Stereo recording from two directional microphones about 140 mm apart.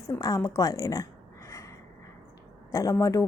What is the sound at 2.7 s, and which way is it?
Speech, 20° left (ahead or behind).